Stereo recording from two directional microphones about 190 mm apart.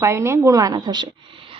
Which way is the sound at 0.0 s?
15° right (ahead or behind).